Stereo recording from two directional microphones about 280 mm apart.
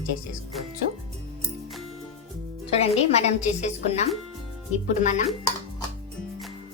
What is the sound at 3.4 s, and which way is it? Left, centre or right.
Speech, left.